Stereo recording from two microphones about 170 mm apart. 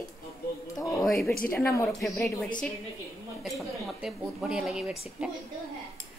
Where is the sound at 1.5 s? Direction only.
15° left (ahead or behind).